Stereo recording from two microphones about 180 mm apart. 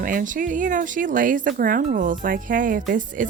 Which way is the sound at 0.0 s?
50° right (ahead or behind).